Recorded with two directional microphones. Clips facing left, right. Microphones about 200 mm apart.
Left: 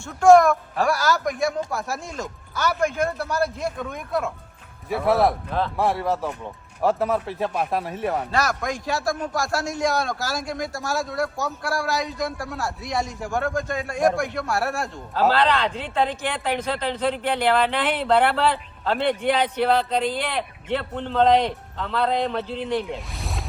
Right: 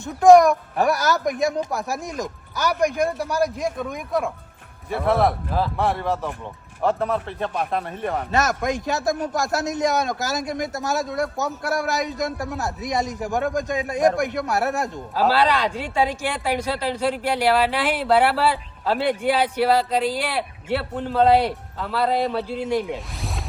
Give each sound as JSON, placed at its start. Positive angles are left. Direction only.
{"t": 0.0, "sound": "speech", "side_deg": -15}
{"t": 4.9, "sound": "speech", "side_deg": 0}
{"t": 8.3, "sound": "a man's voice", "side_deg": -20}
{"t": 15.1, "sound": "speech", "side_deg": -10}
{"t": 23.1, "sound": "zipper", "side_deg": 0}